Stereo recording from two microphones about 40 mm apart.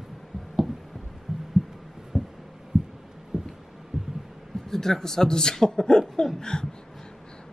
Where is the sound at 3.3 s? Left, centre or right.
Centre.